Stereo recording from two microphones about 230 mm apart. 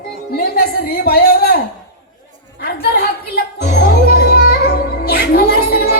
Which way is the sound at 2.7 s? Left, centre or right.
Left.